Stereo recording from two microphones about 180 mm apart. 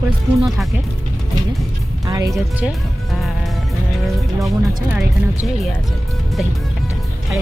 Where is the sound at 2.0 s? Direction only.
20° right (ahead or behind).